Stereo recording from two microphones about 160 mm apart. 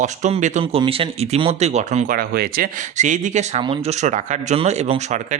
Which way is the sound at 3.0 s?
50° right (ahead or behind).